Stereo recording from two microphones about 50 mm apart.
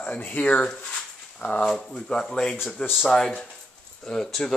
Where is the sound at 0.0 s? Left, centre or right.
Left.